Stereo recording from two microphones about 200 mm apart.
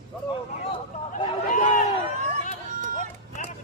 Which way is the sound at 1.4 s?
40° left (ahead or behind).